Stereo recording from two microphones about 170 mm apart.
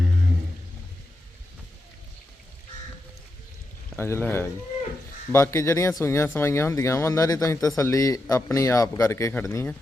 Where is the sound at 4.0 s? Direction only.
15° left (ahead or behind).